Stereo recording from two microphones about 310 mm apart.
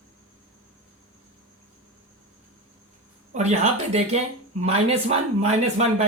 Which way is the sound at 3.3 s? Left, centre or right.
Right.